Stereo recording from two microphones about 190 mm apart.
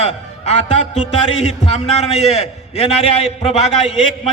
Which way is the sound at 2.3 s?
30° left (ahead or behind).